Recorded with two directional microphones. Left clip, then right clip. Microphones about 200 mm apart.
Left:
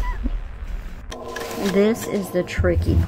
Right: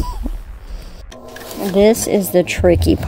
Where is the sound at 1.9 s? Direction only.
30° right (ahead or behind).